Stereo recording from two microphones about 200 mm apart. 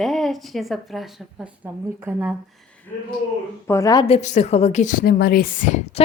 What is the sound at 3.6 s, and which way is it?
Speech, 15° left (ahead or behind).